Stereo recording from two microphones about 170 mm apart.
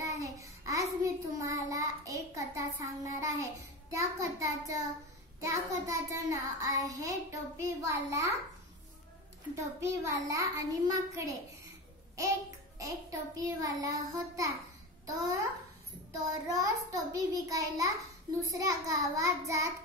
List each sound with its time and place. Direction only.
0.2 s child singing: 20° right (ahead or behind)
9.6 s child singing: 20° right (ahead or behind)
12.7 s child singing: 20° right (ahead or behind)